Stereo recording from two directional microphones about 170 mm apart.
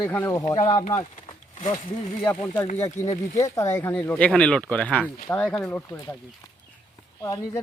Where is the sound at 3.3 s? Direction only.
20° left (ahead or behind).